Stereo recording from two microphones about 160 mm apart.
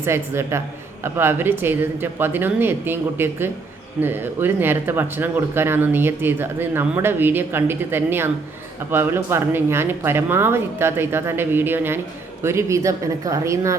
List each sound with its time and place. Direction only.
0.0 s speech: 15° right (ahead or behind)